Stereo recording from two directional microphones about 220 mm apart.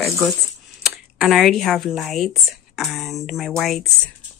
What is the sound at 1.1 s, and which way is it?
Speech, centre (ahead or behind).